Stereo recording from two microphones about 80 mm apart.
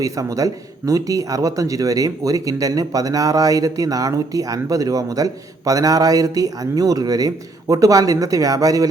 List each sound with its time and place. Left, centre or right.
0.0 s speech: right